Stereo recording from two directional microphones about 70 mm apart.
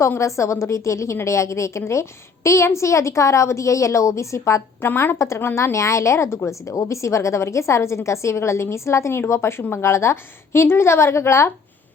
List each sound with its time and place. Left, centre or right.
0.2 s a woman's voice: left
4.9 s a woman's voice: left